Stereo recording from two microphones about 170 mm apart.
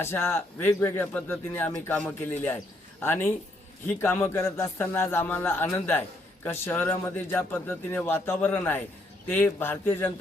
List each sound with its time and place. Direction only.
0.0 s a man's voice: 15° left (ahead or behind)